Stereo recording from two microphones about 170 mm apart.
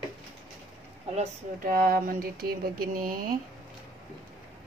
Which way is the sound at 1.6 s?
60° right (ahead or behind).